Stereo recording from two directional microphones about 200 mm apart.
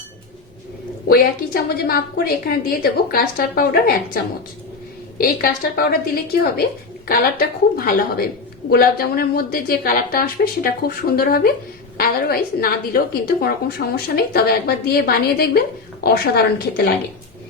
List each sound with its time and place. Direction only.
1.0 s a woman's voice: 50° left (ahead or behind)